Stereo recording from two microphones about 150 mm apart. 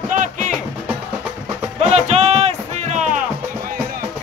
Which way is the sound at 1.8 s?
50° right (ahead or behind).